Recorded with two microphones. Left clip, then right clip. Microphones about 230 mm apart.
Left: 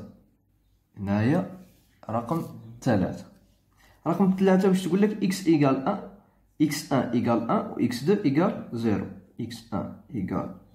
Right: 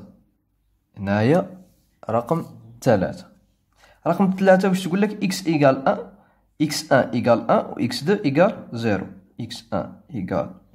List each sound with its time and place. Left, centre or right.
1.0 s speech: right